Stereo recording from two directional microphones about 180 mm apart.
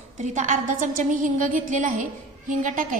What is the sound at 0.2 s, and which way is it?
A woman's voice, 45° right (ahead or behind).